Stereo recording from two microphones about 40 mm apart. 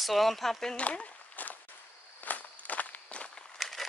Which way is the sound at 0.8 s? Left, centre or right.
Left.